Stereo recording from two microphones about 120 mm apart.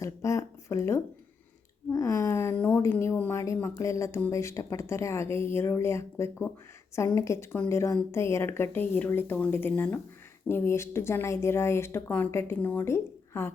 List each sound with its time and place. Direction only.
0.0 s speech: 25° left (ahead or behind)
2.8 s speech: 25° left (ahead or behind)